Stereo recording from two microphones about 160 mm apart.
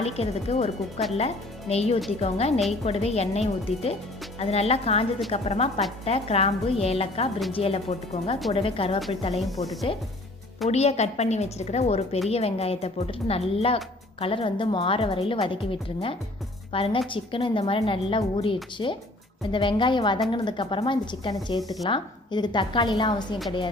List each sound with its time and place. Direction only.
0.0 s a woman's voice: 40° left (ahead or behind)
9.3 s speech: centre (ahead or behind)
9.9 s a woman's voice: 35° left (ahead or behind)